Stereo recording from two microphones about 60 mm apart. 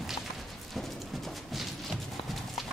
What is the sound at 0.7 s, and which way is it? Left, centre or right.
Clip-clop, centre.